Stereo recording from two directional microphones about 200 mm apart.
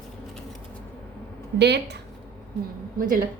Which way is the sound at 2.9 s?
40° right (ahead or behind).